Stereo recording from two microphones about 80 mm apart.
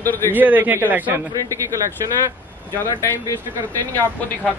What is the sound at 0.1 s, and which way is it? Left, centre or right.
Speech, left.